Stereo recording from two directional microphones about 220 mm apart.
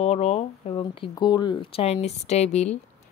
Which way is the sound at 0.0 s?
25° left (ahead or behind).